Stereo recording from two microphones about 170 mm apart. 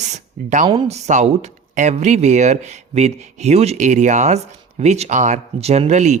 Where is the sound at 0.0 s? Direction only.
45° right (ahead or behind).